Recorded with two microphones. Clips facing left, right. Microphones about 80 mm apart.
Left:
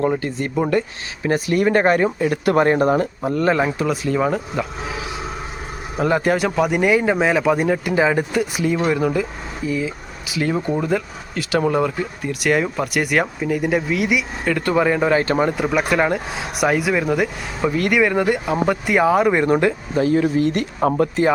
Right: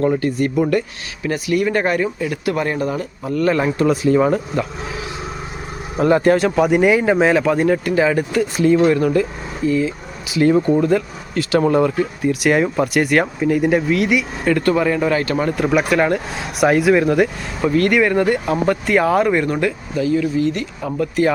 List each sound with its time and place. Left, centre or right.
0.0 s speech: centre
1.3 s speech: left
3.5 s speech: centre
6.0 s speech: centre
8.6 s speech: centre; by 15.4 s left
15.9 s speech: centre; by 20.1 s left
20.1 s speech: left